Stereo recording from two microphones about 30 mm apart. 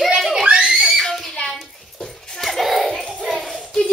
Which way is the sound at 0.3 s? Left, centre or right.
Right.